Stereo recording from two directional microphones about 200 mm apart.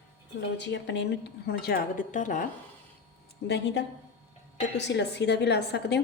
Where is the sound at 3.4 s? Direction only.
60° left (ahead or behind).